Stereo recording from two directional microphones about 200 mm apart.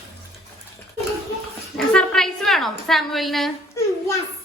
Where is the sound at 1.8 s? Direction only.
5° left (ahead or behind).